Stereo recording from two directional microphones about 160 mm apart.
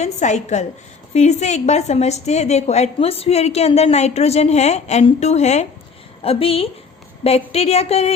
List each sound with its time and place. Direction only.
0.0 s a woman's voice: 45° left (ahead or behind)